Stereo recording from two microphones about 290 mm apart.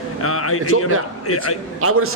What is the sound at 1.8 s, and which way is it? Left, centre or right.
Speech, right.